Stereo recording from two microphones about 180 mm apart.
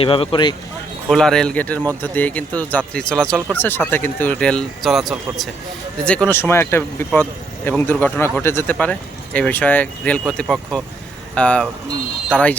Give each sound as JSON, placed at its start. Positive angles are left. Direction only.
{"t": 0.0, "sound": "speech", "side_deg": 30}
{"t": 1.1, "sound": "speech", "side_deg": 5}